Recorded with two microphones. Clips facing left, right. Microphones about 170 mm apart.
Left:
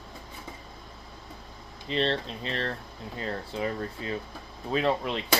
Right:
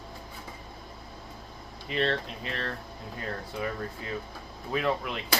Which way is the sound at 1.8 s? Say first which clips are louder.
Left 1 dB; 30° left (ahead or behind).